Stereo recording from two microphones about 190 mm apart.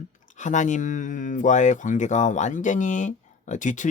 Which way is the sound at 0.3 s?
40° left (ahead or behind).